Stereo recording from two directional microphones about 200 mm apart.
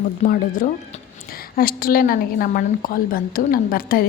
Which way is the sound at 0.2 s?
45° left (ahead or behind).